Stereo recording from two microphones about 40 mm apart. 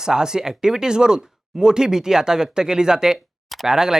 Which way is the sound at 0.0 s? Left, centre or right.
Centre.